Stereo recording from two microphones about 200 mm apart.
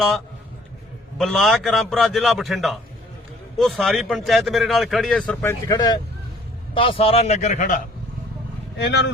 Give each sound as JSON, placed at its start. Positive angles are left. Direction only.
{"t": 1.2, "sound": "a man's voice", "side_deg": 0}
{"t": 8.8, "sound": "speech", "side_deg": 60}